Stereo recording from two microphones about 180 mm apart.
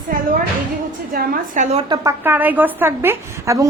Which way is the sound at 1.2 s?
50° right (ahead or behind).